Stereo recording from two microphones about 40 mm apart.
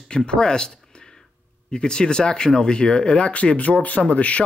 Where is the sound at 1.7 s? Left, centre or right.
Left.